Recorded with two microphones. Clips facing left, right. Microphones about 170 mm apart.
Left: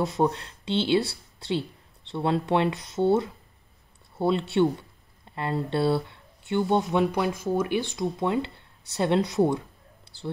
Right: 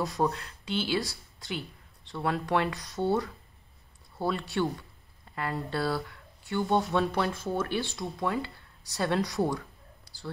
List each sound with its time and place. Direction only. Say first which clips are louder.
0.0 s speech: left 4 dB; 25° left (ahead or behind)